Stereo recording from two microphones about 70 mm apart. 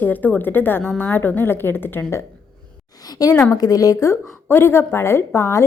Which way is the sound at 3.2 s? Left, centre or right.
Left.